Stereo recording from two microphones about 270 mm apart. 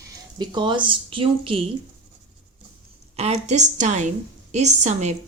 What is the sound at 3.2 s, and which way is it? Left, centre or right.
A woman's voice, right.